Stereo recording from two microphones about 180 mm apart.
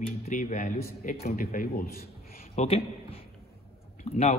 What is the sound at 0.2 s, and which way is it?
A man's voice, 45° left (ahead or behind).